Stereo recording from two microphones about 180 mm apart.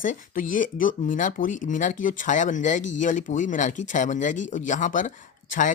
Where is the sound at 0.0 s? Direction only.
45° left (ahead or behind).